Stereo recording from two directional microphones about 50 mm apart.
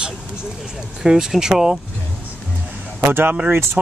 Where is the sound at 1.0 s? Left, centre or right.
Centre.